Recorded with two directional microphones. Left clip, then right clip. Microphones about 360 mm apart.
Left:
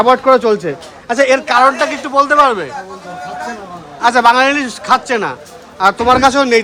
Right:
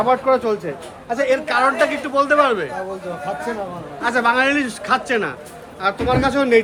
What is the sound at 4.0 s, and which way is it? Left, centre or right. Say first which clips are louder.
A man's voice: left 8 dB; centre.